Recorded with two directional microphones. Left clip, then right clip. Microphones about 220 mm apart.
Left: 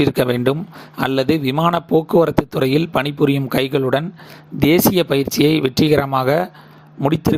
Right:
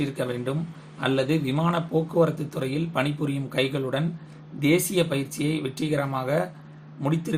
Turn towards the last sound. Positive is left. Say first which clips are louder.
# left 11 dB
turn(degrees=40)  # may be behind; listen again after turning